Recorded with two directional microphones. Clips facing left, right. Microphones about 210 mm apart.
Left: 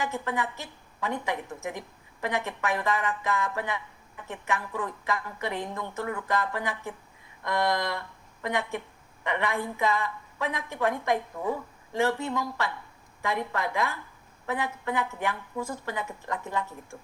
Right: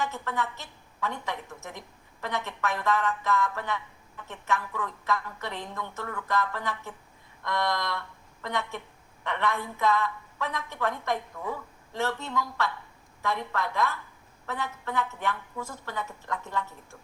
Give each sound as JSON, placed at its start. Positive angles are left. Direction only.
{"t": 0.0, "sound": "a woman's voice", "side_deg": 15}